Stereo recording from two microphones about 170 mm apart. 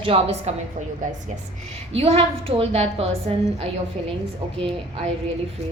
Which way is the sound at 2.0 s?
35° right (ahead or behind).